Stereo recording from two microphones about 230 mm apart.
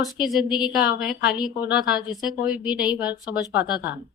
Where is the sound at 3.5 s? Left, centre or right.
Left.